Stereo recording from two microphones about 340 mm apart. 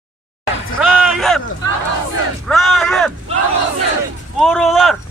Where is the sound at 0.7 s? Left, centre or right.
Centre.